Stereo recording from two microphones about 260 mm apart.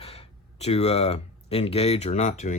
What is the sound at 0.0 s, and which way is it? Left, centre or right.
Speech, left.